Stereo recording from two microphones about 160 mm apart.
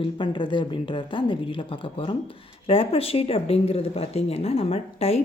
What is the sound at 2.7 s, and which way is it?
A woman's voice, 35° left (ahead or behind).